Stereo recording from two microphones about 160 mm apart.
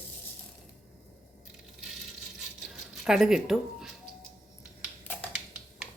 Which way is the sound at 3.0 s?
5° right (ahead or behind).